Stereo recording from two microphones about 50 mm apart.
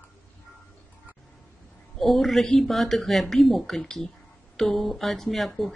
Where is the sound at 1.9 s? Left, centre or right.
Centre.